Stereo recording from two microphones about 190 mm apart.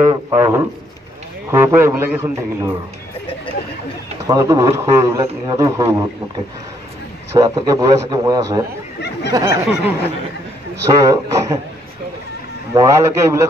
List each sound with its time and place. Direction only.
0.0 s a man's voice: 20° right (ahead or behind)
4.3 s a man's voice: 15° right (ahead or behind)
7.3 s a man's voice: 20° right (ahead or behind)
10.8 s a man's voice: 15° right (ahead or behind)
12.7 s a man's voice: 15° right (ahead or behind)